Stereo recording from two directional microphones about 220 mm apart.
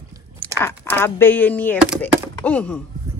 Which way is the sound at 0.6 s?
10° left (ahead or behind).